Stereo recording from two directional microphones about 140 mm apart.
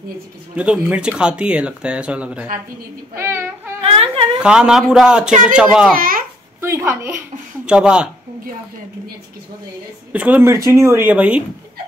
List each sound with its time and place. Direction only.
0.6 s speech: 10° right (ahead or behind)
3.8 s a sound: 45° right (ahead or behind)
4.4 s a man's voice: 5° right (ahead or behind)
5.9 s a child's voice: 90° right
6.6 s speech: 15° right (ahead or behind)
10.1 s speech: 10° right (ahead or behind)